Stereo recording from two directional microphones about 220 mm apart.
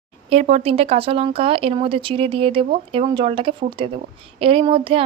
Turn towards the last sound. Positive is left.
turn(degrees=-25)  # may be behind; listen again after turning